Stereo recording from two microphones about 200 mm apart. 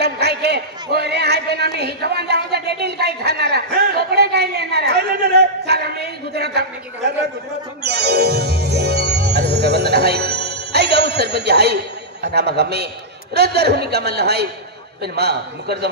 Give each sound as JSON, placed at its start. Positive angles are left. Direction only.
{"t": 0.0, "sound": "a sound", "side_deg": -55}
{"t": 7.8, "sound": "music", "side_deg": -55}
{"t": 13.3, "sound": "a man's voice", "side_deg": -55}